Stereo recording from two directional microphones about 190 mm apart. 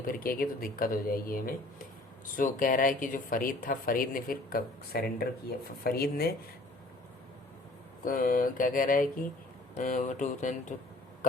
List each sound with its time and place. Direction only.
0.1 s speech: 50° left (ahead or behind)
8.0 s speech: 45° left (ahead or behind)